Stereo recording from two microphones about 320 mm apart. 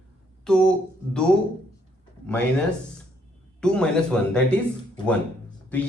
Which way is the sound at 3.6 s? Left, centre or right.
Centre.